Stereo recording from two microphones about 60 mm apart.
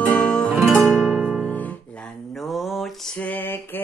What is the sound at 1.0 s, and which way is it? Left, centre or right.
Music, centre.